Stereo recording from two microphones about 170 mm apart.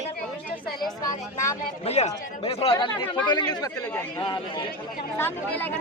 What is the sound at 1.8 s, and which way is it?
Speech, 40° left (ahead or behind).